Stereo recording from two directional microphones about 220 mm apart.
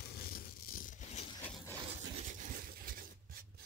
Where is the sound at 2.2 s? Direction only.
40° right (ahead or behind).